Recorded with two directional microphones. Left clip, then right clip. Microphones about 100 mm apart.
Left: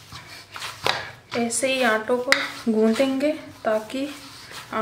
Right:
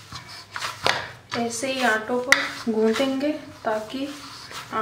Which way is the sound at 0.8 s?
10° right (ahead or behind).